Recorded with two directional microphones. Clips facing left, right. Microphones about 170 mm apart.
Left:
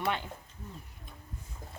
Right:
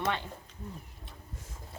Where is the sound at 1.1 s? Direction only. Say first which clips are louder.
Even; 90° right.